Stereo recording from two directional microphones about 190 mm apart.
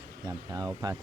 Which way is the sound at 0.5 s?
20° right (ahead or behind).